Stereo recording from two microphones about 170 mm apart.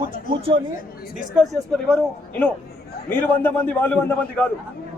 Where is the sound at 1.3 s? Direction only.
5° left (ahead or behind).